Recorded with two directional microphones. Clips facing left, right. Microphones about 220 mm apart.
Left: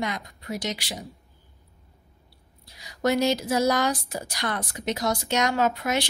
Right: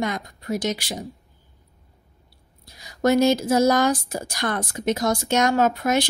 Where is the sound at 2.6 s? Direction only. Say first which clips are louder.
Right 4 dB; 45° right (ahead or behind).